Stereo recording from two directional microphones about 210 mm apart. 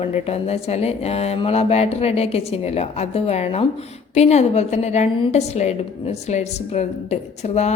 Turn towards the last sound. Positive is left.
turn(degrees=30)  # may be behind; listen again after turning